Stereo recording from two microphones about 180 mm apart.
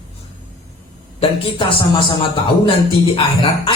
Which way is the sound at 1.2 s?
30° left (ahead or behind).